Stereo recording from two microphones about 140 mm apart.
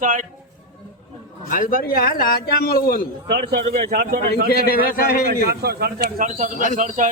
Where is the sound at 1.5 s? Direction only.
80° left.